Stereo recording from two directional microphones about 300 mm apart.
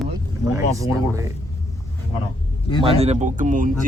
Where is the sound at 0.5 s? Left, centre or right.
Centre.